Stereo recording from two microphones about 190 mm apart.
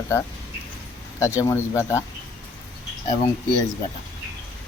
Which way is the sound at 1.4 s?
15° left (ahead or behind).